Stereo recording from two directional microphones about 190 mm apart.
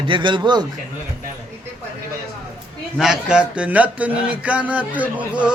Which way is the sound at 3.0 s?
5° right (ahead or behind).